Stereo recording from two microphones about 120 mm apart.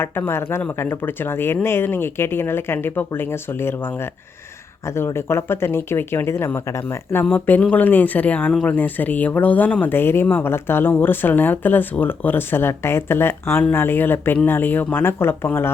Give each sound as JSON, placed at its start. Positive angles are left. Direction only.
{"t": 0.0, "sound": "speech", "side_deg": 20}